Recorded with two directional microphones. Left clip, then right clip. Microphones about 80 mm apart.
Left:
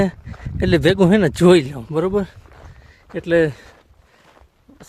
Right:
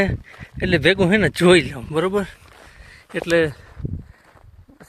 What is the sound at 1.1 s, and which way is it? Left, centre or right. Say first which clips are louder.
Speech: left 1 dB; left.